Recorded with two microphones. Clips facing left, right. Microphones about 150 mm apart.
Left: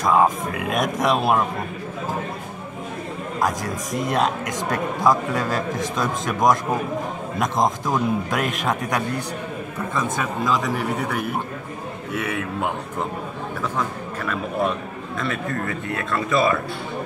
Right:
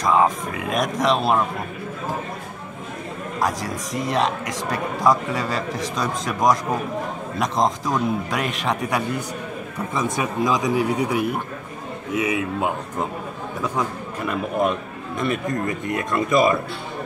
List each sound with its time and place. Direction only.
0.0 s a man's voice: centre (ahead or behind)
3.3 s a man's voice: centre (ahead or behind)
9.9 s a man's voice: 15° right (ahead or behind)
12.2 s a man's voice: 10° right (ahead or behind)